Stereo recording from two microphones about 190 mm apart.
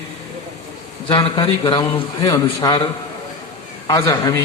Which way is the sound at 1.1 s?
25° left (ahead or behind).